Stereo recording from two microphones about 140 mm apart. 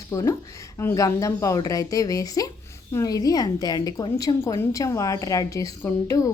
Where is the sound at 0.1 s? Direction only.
25° left (ahead or behind).